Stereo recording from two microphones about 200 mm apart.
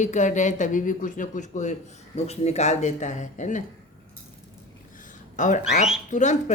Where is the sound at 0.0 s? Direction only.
35° left (ahead or behind).